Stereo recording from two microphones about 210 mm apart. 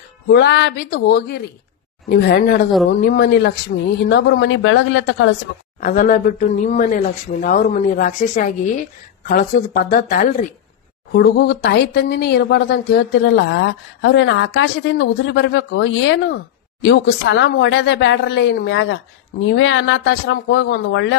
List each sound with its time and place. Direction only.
0.3 s speech: 55° left (ahead or behind)
5.8 s speech: 40° left (ahead or behind)
11.1 s speech: 50° left (ahead or behind)